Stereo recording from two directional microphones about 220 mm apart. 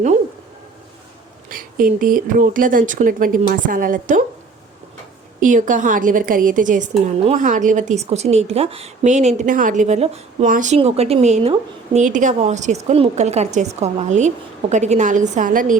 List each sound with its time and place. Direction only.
1.5 s a woman's voice: 40° right (ahead or behind)
5.4 s a woman's voice: 35° right (ahead or behind)